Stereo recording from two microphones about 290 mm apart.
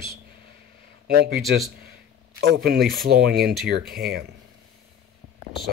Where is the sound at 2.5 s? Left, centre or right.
Right.